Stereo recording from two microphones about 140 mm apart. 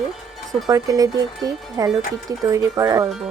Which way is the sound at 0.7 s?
25° right (ahead or behind).